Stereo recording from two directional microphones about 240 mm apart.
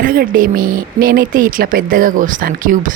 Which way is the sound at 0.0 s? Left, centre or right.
Right.